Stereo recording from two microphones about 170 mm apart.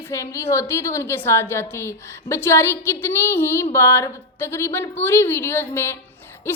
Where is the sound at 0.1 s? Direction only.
15° left (ahead or behind).